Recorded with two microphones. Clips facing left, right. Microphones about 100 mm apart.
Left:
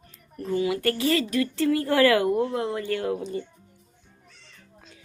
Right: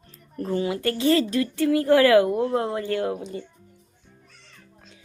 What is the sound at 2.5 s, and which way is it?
Speech, 30° right (ahead or behind).